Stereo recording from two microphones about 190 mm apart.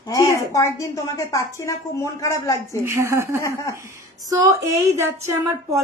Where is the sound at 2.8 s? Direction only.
15° right (ahead or behind).